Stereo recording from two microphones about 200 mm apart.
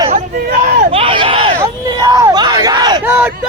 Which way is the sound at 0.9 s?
25° right (ahead or behind).